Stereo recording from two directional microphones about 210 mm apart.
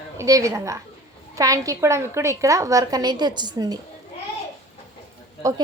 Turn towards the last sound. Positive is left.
turn(degrees=-15)  # may be behind; listen again after turning